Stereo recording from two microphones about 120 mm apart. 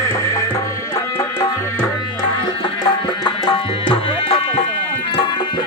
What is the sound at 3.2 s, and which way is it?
Tabla, 40° left (ahead or behind).